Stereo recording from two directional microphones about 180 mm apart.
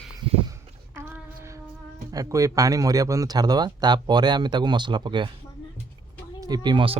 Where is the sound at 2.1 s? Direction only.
20° right (ahead or behind).